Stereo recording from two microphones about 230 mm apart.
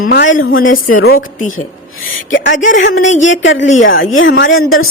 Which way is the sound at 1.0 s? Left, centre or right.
Left.